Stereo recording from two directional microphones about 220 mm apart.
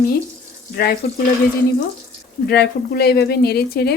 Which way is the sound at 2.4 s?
50° left (ahead or behind).